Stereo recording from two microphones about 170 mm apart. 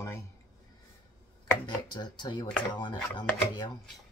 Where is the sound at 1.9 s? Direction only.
25° left (ahead or behind).